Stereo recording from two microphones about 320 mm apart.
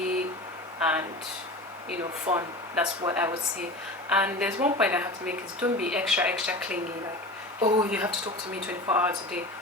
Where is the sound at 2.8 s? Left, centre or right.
Centre.